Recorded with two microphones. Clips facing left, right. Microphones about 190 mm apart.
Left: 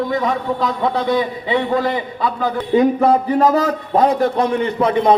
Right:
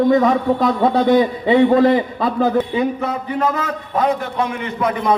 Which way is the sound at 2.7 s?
40° left (ahead or behind).